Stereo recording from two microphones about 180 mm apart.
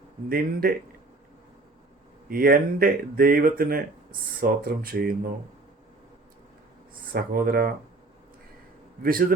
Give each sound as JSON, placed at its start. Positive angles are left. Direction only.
{"t": 0.3, "sound": "speech", "side_deg": -55}
{"t": 2.3, "sound": "speech", "side_deg": -55}
{"t": 7.1, "sound": "speech", "side_deg": -55}